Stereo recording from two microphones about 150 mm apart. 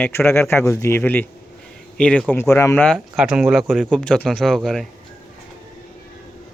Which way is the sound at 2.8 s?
5° right (ahead or behind).